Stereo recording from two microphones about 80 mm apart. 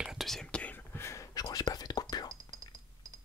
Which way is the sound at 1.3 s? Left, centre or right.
Left.